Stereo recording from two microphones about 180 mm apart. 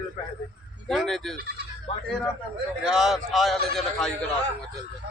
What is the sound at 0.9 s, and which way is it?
Speech, centre (ahead or behind).